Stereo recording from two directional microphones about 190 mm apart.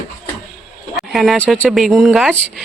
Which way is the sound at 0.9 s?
Centre (ahead or behind).